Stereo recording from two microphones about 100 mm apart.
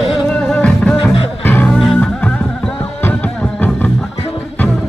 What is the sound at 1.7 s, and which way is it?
Music, 5° left (ahead or behind).